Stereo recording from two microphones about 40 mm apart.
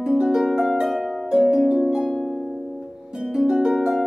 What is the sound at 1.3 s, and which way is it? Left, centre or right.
Harp, centre.